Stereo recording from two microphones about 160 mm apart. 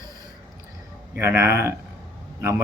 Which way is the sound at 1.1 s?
15° right (ahead or behind).